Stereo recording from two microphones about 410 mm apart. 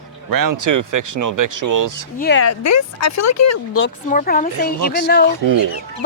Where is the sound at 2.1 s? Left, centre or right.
Left.